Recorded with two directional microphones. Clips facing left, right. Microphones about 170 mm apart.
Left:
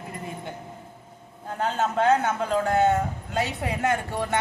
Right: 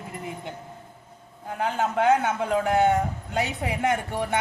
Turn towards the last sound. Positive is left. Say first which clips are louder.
# even
turn(degrees=-15)  # may be behind; listen again after turning